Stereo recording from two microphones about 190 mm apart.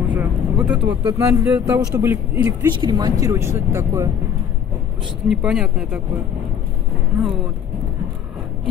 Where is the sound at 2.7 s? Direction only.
20° right (ahead or behind).